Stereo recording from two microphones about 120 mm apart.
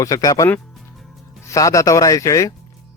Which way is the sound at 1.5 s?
25° left (ahead or behind).